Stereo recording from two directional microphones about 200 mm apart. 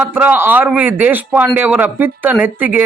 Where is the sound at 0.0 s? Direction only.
10° right (ahead or behind).